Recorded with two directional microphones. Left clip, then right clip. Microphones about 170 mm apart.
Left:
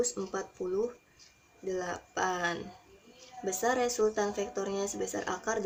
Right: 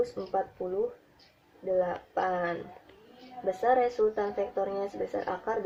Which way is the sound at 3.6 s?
60° left (ahead or behind).